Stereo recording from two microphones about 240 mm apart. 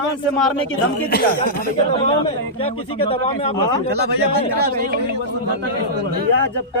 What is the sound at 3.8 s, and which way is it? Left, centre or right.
A man's voice, right.